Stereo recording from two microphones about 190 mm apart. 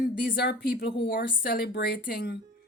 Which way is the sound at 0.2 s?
60° left (ahead or behind).